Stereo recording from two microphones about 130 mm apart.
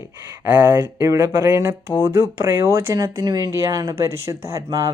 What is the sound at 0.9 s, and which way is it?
Speech, 25° right (ahead or behind).